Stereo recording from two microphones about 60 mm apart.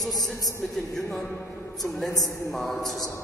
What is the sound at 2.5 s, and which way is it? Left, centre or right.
Speech, centre.